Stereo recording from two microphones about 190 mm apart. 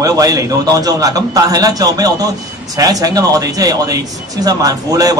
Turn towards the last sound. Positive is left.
turn(degrees=-20)  # may be behind; listen again after turning